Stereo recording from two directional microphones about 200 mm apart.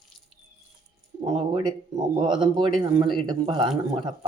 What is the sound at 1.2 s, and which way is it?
Speech, 20° right (ahead or behind).